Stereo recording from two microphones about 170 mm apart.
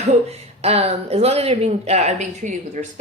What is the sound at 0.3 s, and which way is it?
Speech, 35° right (ahead or behind).